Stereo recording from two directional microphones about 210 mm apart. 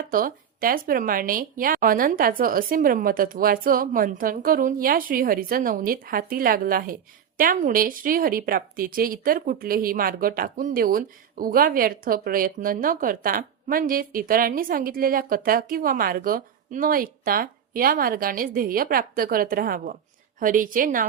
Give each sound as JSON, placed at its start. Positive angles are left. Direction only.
{"t": 0.1, "sound": "a woman's voice", "side_deg": -40}